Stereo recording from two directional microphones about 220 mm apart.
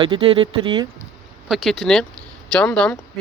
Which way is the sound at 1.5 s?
Centre (ahead or behind).